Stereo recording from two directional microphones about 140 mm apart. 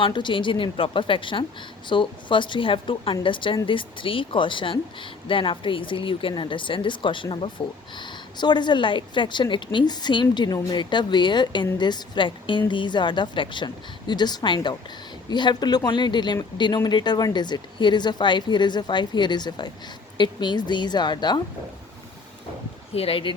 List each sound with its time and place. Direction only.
0.0 s a woman's voice: 35° left (ahead or behind)
23.0 s a woman's voice: 40° left (ahead or behind)